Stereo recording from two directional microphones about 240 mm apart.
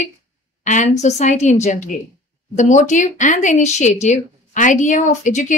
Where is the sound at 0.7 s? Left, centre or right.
Left.